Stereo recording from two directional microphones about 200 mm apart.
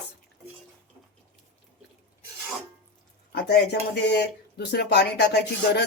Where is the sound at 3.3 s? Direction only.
55° left (ahead or behind).